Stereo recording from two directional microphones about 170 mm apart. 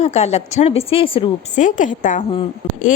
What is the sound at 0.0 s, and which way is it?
A woman's voice, 40° left (ahead or behind).